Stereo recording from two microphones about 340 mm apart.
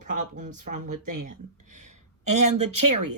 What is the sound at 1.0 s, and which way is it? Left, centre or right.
Speech, right.